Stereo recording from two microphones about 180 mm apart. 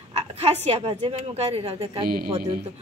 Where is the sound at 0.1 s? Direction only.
35° right (ahead or behind).